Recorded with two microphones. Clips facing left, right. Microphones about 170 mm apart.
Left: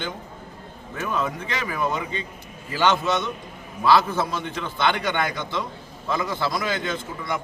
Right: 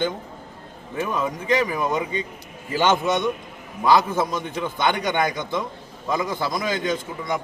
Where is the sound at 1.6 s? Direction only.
20° right (ahead or behind).